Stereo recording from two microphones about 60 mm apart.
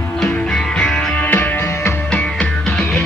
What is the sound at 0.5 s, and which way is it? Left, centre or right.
Music, centre.